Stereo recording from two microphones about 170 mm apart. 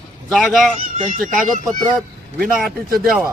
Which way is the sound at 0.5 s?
Centre (ahead or behind).